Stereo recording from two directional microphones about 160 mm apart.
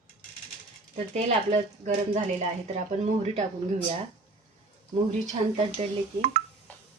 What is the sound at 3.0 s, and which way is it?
Speech, 45° right (ahead or behind).